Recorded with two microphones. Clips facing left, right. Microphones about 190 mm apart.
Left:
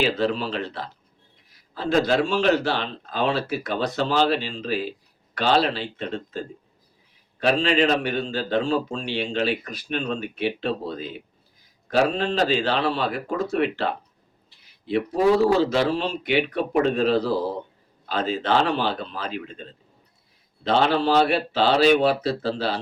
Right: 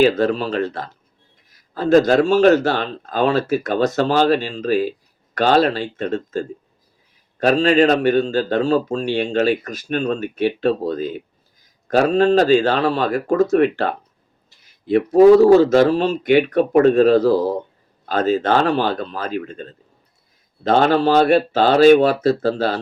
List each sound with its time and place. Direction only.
0.0 s speech: 45° right (ahead or behind)